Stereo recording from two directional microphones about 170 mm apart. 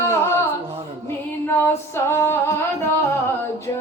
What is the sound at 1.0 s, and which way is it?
Female singing, 15° left (ahead or behind).